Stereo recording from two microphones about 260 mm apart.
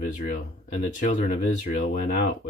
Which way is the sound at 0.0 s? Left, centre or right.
Left.